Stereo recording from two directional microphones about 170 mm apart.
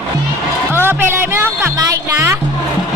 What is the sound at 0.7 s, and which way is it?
Music, 15° right (ahead or behind).